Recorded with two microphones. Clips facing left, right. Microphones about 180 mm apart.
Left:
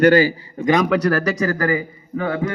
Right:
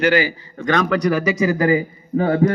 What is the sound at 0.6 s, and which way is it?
Speech, 5° left (ahead or behind).